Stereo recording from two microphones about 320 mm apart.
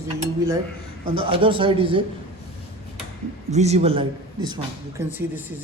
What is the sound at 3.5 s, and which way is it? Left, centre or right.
A man's voice, right.